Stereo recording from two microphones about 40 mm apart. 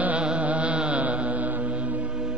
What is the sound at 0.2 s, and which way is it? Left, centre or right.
Music, right.